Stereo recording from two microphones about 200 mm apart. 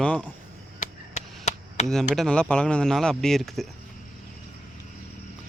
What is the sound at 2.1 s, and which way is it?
Speech, 5° left (ahead or behind).